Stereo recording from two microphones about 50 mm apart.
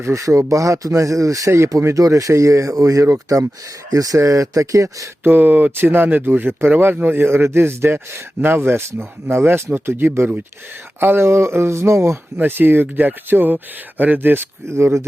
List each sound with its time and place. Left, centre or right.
0.0 s speech: right
4.2 s speech: right
5.2 s speech: right
12.4 s speech: right
14.7 s speech: right